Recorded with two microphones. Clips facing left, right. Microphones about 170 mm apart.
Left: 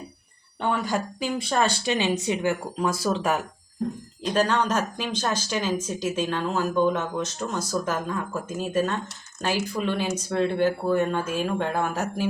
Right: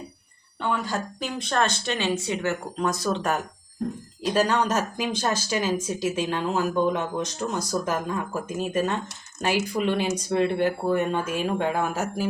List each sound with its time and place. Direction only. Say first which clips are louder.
0.9 s speech: left 3 dB; 10° left (ahead or behind)
4.3 s speech: even; 10° right (ahead or behind)